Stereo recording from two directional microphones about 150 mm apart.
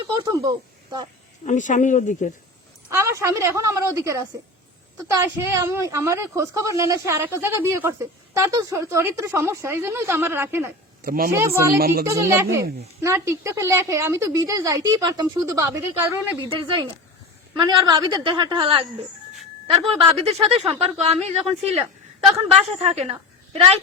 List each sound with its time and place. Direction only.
0.1 s speech: 25° right (ahead or behind)
1.5 s speech: 55° left (ahead or behind)
2.9 s a woman's voice: 20° right (ahead or behind)
11.0 s speech: 70° right (ahead or behind)
11.3 s a woman's voice: 20° right (ahead or behind)
16.6 s speech: 30° right (ahead or behind)
19.9 s a woman's voice: 40° right (ahead or behind)